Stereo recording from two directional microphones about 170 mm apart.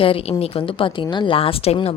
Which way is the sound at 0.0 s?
35° left (ahead or behind).